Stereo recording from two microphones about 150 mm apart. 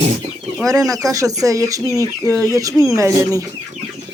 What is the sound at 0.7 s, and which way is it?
Speech, 25° right (ahead or behind).